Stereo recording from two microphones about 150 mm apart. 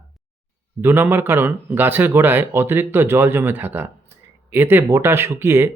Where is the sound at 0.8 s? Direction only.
15° right (ahead or behind).